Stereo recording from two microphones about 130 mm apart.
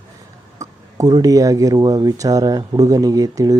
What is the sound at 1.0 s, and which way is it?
Speech, 25° right (ahead or behind).